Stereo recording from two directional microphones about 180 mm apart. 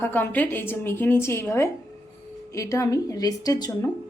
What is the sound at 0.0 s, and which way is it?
A woman's voice, 10° left (ahead or behind).